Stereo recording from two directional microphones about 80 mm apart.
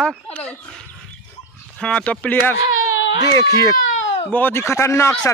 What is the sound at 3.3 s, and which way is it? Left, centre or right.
Speech, left.